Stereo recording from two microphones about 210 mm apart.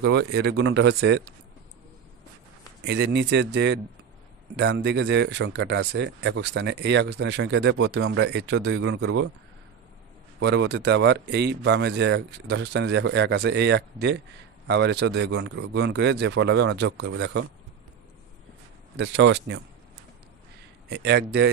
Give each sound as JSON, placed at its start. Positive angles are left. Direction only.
{"t": 0.0, "sound": "speech", "side_deg": -50}
{"t": 2.8, "sound": "a man's voice", "side_deg": -55}
{"t": 10.4, "sound": "speech", "side_deg": -55}
{"t": 18.9, "sound": "speech", "side_deg": -55}
{"t": 20.9, "sound": "a man's voice", "side_deg": -55}